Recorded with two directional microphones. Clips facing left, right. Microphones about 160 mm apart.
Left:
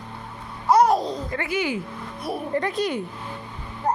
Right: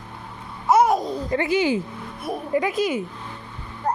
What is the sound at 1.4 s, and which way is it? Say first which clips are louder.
Speech: right 6 dB; 25° right (ahead or behind).